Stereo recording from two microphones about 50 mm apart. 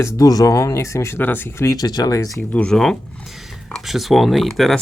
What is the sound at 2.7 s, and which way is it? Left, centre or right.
Speech, centre.